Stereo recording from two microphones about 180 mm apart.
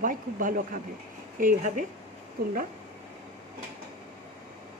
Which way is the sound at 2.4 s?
60° right (ahead or behind).